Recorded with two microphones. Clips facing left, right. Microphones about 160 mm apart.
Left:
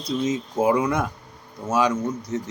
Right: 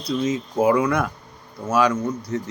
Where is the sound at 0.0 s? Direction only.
25° left (ahead or behind).